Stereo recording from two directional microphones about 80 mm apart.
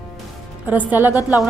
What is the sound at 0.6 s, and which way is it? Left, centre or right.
Speech, right.